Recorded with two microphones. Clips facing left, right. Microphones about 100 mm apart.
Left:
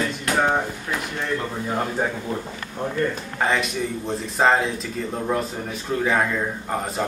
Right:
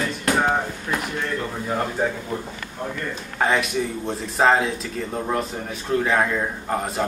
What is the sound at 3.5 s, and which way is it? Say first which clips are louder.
Speech: right 1 dB; centre (ahead or behind).